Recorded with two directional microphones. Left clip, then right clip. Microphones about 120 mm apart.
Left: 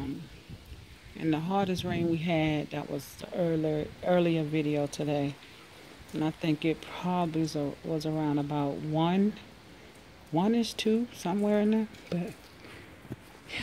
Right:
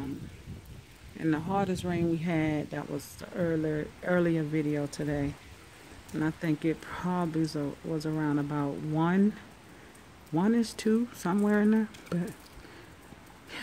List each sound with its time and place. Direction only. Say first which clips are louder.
1.2 s speech: even; 35° right (ahead or behind)
2.1 s speech: left 1 dB; 25° right (ahead or behind)
3.3 s speech: left 1 dB; 15° right (ahead or behind)
4.5 s speech: left 1 dB; 5° right (ahead or behind)
4.8 s speech: left 2 dB; 15° right (ahead or behind)
6.1 s speech: left 1 dB; 20° right (ahead or behind)
10.3 s speech: left 1 dB; 20° right (ahead or behind)